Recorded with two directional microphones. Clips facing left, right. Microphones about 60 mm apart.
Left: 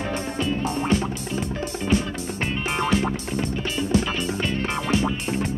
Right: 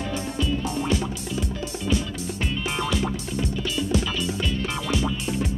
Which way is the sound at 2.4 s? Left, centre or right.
Left.